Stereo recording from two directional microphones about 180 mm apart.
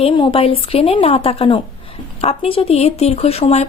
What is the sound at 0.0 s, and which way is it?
Speech, 30° left (ahead or behind).